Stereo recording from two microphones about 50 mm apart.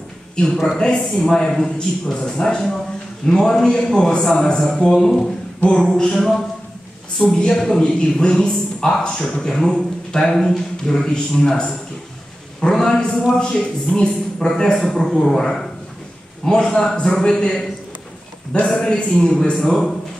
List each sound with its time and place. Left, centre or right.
0.9 s a man's voice: centre
18.7 s a man's voice: centre